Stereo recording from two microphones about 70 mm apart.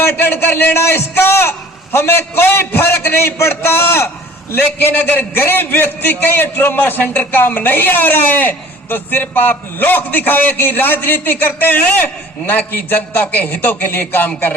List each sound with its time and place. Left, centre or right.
0.0 s a man's voice: left